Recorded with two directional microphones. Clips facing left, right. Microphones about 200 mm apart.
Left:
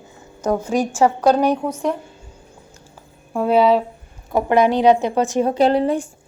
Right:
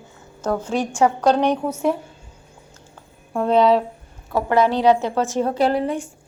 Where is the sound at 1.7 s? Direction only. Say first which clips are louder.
Right 1 dB; 5° right (ahead or behind).